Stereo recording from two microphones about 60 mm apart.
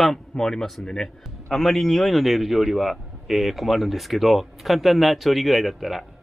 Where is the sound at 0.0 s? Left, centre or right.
Centre.